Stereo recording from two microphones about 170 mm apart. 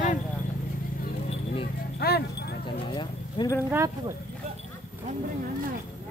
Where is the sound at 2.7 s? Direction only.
30° left (ahead or behind).